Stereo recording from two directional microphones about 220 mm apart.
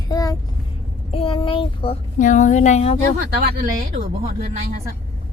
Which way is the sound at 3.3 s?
45° right (ahead or behind).